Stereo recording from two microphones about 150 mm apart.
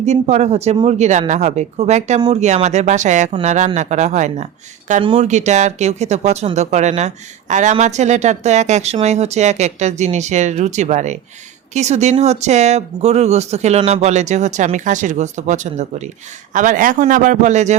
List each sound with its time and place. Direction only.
0.0 s a man's voice: 50° right (ahead or behind)